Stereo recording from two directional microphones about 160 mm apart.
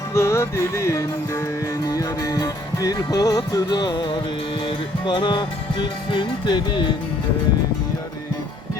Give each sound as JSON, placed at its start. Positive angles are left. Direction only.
{"t": 0.1, "sound": "music", "side_deg": 15}